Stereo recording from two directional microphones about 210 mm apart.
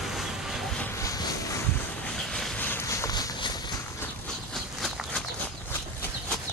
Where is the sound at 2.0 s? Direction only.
5° left (ahead or behind); by 3.5 s 20° left (ahead or behind).